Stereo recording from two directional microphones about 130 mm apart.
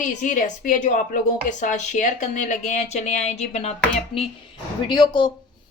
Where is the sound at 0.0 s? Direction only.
80° left; by 3.7 s 60° left (ahead or behind).